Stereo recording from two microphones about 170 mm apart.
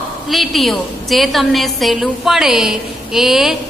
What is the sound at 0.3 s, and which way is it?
A woman's voice, centre (ahead or behind).